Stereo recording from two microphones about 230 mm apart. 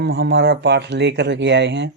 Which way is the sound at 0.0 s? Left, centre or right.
Right.